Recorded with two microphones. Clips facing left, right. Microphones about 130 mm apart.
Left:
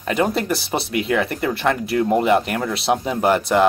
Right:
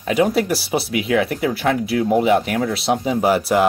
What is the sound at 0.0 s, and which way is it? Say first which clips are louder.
Speech: right 3 dB; 5° right (ahead or behind).